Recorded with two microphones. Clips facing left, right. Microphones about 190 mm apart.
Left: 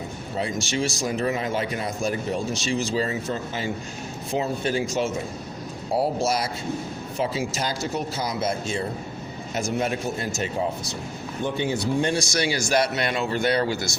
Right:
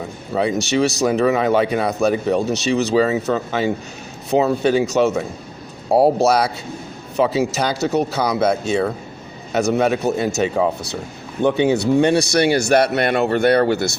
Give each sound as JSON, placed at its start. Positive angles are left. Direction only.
{"t": 0.3, "sound": "speech", "side_deg": -70}